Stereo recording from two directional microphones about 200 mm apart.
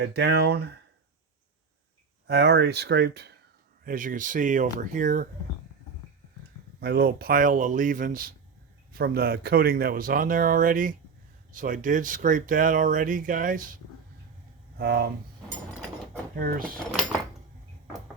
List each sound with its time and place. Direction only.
0.0 s speech: 55° right (ahead or behind)
2.2 s speech: 55° right (ahead or behind)
3.8 s speech: 40° right (ahead or behind)
6.7 s speech: 50° right (ahead or behind)
14.8 s speech: 55° right (ahead or behind)
16.3 s speech: 45° right (ahead or behind)